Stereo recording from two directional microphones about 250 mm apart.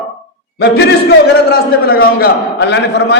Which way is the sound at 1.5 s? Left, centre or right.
Left.